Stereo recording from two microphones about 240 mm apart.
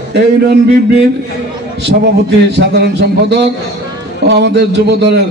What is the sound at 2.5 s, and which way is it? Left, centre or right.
A man's voice, right.